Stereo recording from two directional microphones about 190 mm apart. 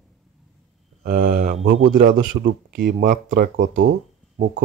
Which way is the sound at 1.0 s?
50° right (ahead or behind).